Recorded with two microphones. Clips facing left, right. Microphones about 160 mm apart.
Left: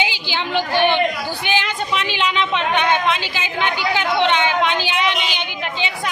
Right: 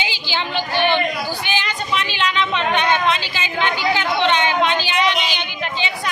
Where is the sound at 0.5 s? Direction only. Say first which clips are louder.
Left 2 dB; 15° left (ahead or behind).